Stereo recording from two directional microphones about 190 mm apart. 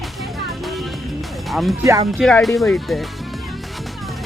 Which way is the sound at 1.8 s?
15° right (ahead or behind).